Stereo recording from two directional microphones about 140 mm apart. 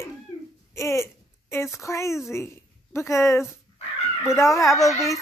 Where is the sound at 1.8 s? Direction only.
20° left (ahead or behind).